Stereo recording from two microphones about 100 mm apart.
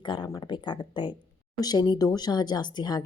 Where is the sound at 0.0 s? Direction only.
55° left (ahead or behind).